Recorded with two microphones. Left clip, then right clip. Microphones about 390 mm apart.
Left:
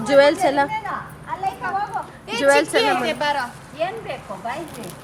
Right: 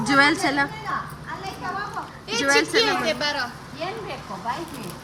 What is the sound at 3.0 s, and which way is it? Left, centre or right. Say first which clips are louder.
Speech: left 3 dB; centre.